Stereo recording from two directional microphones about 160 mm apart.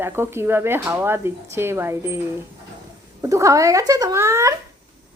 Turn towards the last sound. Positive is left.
turn(degrees=-20)  # may be behind; listen again after turning